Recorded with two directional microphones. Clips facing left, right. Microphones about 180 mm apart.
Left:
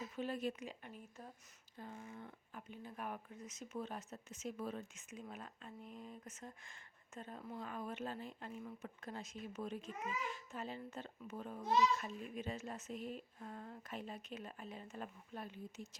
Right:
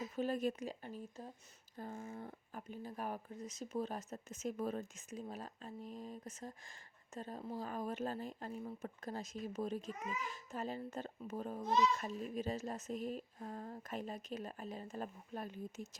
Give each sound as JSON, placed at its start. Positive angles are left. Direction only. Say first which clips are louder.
{"t": 0.2, "sound": "speech", "louder": "right 4 dB", "side_deg": -45}
{"t": 1.7, "sound": "speech", "louder": "right 5 dB", "side_deg": -45}